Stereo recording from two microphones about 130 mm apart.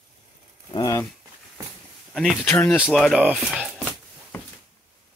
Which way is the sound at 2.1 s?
5° left (ahead or behind).